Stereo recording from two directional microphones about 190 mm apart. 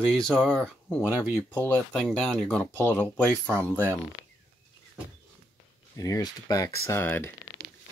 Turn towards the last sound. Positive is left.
turn(degrees=10)  # may be behind; listen again after turning